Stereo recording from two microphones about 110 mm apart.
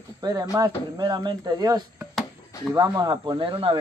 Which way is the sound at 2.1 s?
5° left (ahead or behind).